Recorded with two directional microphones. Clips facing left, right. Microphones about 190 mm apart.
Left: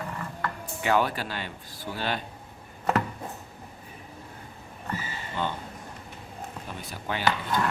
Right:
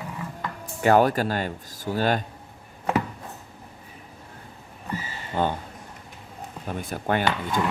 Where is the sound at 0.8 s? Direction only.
45° right (ahead or behind).